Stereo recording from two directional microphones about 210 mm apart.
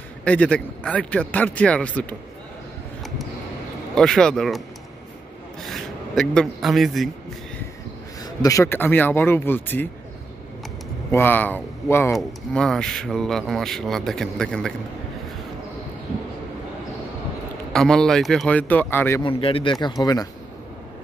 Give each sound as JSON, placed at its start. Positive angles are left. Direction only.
{"t": 0.2, "sound": "speech", "side_deg": 5}
{"t": 3.9, "sound": "speech", "side_deg": 5}
{"t": 8.2, "sound": "speech", "side_deg": 20}
{"t": 11.1, "sound": "speech", "side_deg": 10}
{"t": 17.7, "sound": "speech", "side_deg": 5}
{"t": 19.2, "sound": "speech", "side_deg": 25}